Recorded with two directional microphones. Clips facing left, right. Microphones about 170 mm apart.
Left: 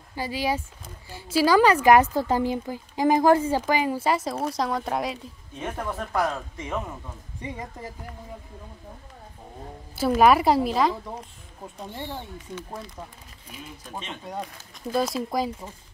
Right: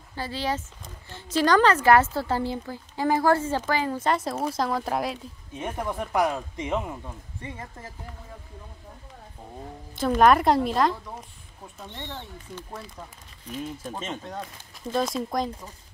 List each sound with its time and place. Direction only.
0.1 s speech: 10° left (ahead or behind)
5.6 s speech: 15° right (ahead or behind)
7.4 s speech: 15° left (ahead or behind)
9.9 s a woman's voice: 5° left (ahead or behind)
14.9 s a woman's voice: 5° left (ahead or behind)